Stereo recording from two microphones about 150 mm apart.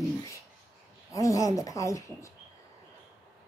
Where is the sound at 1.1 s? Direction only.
20° left (ahead or behind).